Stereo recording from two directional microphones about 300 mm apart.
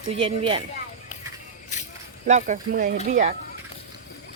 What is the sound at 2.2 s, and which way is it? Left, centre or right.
Speech, right.